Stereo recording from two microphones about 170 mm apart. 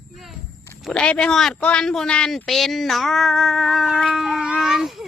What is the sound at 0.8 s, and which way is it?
A man's voice, 5° left (ahead or behind).